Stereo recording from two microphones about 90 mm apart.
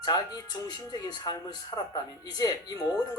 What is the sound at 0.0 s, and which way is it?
Speech, 50° left (ahead or behind).